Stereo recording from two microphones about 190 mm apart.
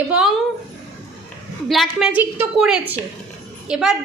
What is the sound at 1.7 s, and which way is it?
A woman's voice, centre (ahead or behind).